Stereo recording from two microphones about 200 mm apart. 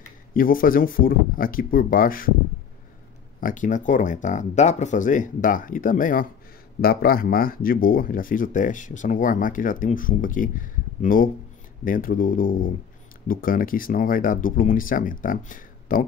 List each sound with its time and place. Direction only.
0.3 s speech: 45° left (ahead or behind)
3.3 s speech: 40° left (ahead or behind)